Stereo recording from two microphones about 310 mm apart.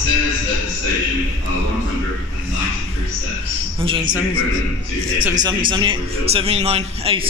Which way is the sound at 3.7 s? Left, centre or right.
Centre.